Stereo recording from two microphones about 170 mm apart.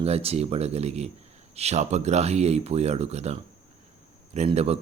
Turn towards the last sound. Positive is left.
turn(degrees=-40)  # may be behind; listen again after turning